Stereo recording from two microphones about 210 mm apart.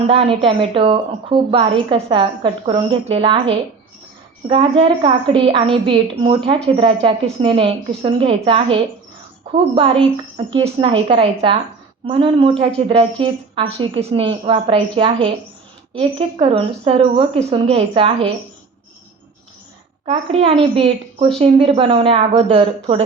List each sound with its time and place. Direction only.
0.1 s a woman's voice: 25° right (ahead or behind)
20.1 s a woman's voice: 30° right (ahead or behind)